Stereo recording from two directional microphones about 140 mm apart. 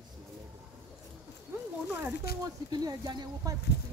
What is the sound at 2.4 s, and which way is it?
Speech, 25° right (ahead or behind).